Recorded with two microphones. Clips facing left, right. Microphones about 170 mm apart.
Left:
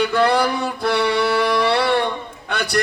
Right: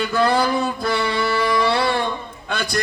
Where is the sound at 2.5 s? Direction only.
70° left (ahead or behind).